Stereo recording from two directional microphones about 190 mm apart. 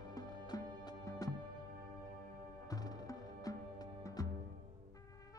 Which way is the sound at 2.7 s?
20° left (ahead or behind).